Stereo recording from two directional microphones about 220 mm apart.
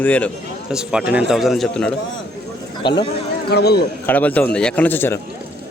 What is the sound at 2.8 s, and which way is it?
Speech, 20° left (ahead or behind).